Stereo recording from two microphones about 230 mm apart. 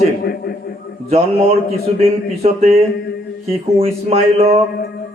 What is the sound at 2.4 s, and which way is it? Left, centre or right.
Speech, right.